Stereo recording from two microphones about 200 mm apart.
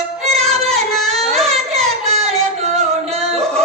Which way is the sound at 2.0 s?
30° right (ahead or behind).